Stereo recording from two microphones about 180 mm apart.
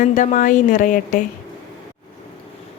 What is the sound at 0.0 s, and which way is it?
A woman's voice, 45° left (ahead or behind).